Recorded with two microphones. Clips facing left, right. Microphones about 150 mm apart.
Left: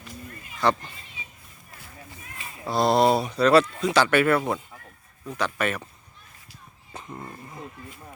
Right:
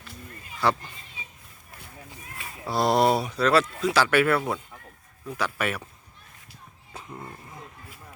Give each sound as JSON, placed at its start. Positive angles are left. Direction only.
{"t": 0.6, "sound": "speech", "side_deg": -10}
{"t": 2.4, "sound": "speech", "side_deg": -10}
{"t": 6.9, "sound": "speech", "side_deg": 0}